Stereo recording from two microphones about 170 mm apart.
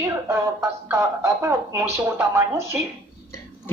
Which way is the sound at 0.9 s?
15° right (ahead or behind).